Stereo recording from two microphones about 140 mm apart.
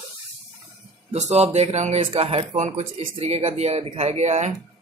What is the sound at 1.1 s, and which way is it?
Speech, 50° right (ahead or behind).